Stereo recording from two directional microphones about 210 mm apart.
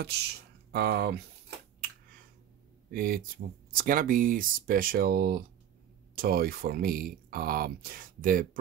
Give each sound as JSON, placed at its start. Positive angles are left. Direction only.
{"t": 0.0, "sound": "speech", "side_deg": -50}
{"t": 2.9, "sound": "speech", "side_deg": -45}